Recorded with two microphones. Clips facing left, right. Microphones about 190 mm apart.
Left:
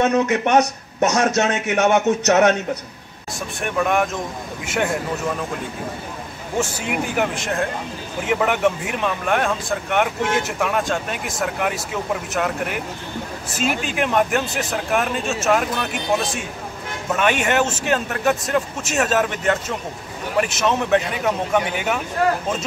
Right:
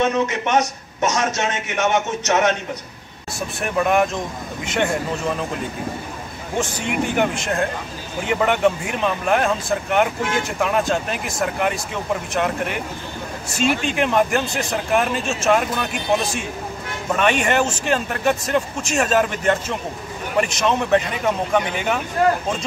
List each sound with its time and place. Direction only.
0.1 s speech: 65° left (ahead or behind)
3.6 s speech: centre (ahead or behind)
6.6 s speech: 5° left (ahead or behind)
21.7 s speech: 5° left (ahead or behind)